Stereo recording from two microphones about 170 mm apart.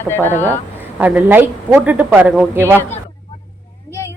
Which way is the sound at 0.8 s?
10° right (ahead or behind).